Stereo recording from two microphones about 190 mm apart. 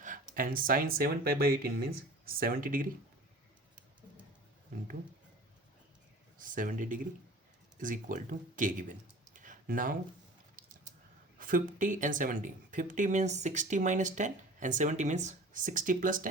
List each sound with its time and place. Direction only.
0.0 s speech: 45° right (ahead or behind)
6.4 s speech: 45° right (ahead or behind)
11.3 s speech: 45° right (ahead or behind)